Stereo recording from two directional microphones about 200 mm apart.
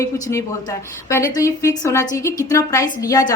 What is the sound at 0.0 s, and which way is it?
A woman's voice, 15° left (ahead or behind).